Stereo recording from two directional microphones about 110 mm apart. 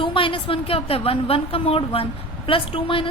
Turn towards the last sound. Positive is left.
turn(degrees=50)  # may be behind; listen again after turning